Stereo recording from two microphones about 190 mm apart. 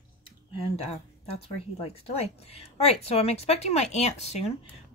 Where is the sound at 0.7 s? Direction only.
35° left (ahead or behind).